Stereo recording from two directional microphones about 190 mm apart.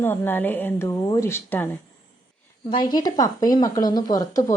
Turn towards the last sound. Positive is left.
turn(degrees=20)  # may be behind; listen again after turning